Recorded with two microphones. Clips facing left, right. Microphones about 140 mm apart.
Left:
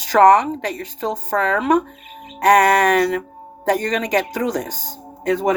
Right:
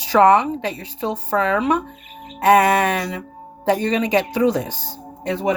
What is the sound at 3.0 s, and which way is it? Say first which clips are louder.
Speech: left 8 dB; 55° left (ahead or behind).